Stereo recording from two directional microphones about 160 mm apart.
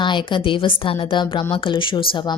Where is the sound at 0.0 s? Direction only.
30° left (ahead or behind).